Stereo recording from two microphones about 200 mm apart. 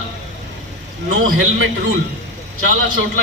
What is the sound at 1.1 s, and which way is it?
A man's voice, 90° right.